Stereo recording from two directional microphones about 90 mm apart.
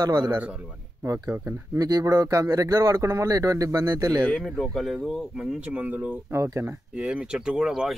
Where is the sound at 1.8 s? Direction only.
45° right (ahead or behind).